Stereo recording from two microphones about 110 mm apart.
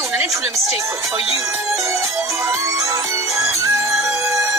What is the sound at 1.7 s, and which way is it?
Music, 30° right (ahead or behind).